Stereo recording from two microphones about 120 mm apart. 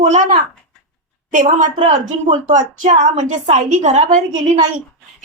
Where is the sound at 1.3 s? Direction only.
90° right; by 4.7 s 70° right (ahead or behind).